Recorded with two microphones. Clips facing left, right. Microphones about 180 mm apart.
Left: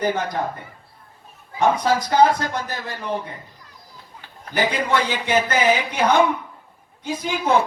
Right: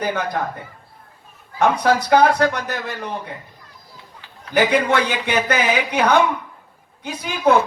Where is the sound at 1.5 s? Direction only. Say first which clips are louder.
Right 2 dB; 65° right (ahead or behind).